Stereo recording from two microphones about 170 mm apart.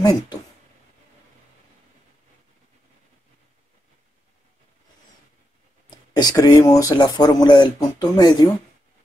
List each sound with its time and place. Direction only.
0.0 s speech: 25° left (ahead or behind)
5.9 s a sound: 25° left (ahead or behind)
6.6 s speech: 20° left (ahead or behind)